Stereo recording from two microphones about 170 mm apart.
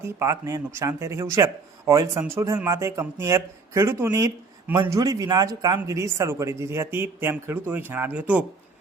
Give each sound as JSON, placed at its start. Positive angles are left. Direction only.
{"t": 0.0, "sound": "speech", "side_deg": -15}